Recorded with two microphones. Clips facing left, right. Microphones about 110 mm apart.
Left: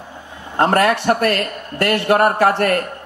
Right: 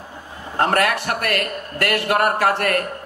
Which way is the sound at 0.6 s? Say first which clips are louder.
Left 4 dB; 30° left (ahead or behind).